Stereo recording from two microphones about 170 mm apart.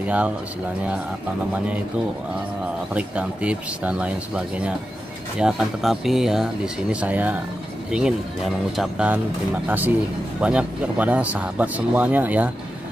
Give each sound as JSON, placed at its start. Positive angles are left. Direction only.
{"t": 0.0, "sound": "speech", "side_deg": -5}
{"t": 2.9, "sound": "speech", "side_deg": -5}